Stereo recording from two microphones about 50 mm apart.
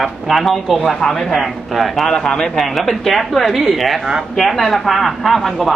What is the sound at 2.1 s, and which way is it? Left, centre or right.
Speech, centre.